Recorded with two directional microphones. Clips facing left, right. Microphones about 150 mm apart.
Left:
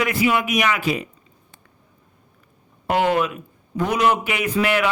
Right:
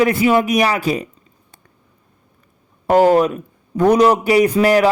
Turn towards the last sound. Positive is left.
turn(degrees=-35)  # may be behind; listen again after turning